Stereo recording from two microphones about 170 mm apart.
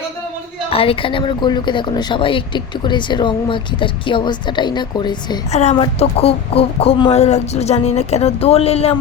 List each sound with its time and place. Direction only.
0.7 s a woman's voice: 35° left (ahead or behind)
5.5 s speech: 40° left (ahead or behind)